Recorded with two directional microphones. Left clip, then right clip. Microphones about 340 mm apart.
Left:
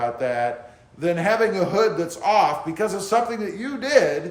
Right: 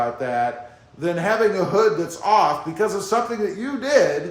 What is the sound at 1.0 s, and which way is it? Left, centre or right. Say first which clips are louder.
A man's voice: even; centre.